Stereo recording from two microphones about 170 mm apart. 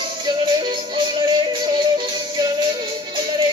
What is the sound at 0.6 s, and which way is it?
Music, 25° right (ahead or behind).